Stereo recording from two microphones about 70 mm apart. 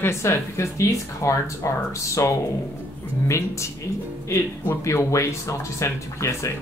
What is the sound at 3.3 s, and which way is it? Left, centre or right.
Speech, left.